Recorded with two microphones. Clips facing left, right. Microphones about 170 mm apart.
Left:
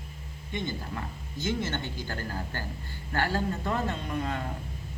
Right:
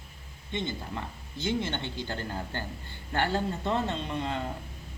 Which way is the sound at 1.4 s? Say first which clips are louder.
Even; 15° right (ahead or behind).